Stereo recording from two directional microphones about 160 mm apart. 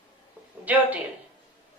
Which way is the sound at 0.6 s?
10° right (ahead or behind).